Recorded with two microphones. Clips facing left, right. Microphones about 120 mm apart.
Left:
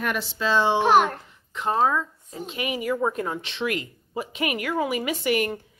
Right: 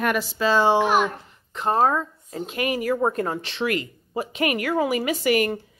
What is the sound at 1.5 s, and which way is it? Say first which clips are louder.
Speech: right 2 dB; 40° right (ahead or behind).